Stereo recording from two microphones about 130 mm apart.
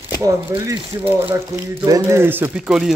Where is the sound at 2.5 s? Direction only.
5° right (ahead or behind).